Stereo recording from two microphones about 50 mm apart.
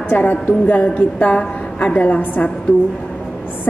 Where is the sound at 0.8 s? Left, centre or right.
Left.